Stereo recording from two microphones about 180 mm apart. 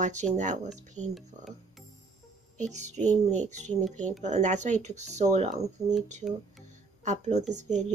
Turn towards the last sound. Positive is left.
turn(degrees=-40)  # may be behind; listen again after turning